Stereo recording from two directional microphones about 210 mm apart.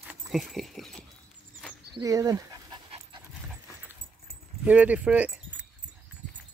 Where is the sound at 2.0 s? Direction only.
15° right (ahead or behind).